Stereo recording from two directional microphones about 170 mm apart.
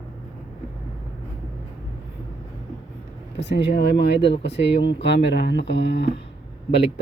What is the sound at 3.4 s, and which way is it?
Speech, 90° left.